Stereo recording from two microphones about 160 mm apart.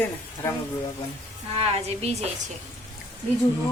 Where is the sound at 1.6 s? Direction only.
40° right (ahead or behind).